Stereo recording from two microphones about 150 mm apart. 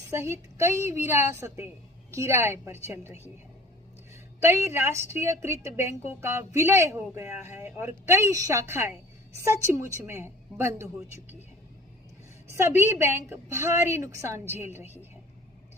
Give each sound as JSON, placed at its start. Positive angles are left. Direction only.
{"t": 0.0, "sound": "a woman's voice", "side_deg": -20}
{"t": 12.5, "sound": "a woman's voice", "side_deg": -20}